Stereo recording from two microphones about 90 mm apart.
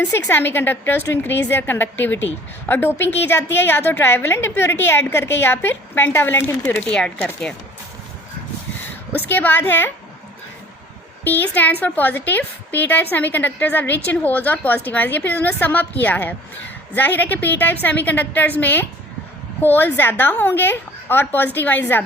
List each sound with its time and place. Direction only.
0.0 s a woman's voice: 20° left (ahead or behind)
9.3 s a woman's voice: 20° left (ahead or behind)
11.2 s a woman's voice: 20° left (ahead or behind)